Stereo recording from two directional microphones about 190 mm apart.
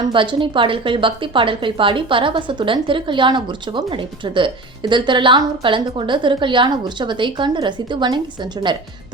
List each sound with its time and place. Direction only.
0.1 s a woman's voice: 25° right (ahead or behind)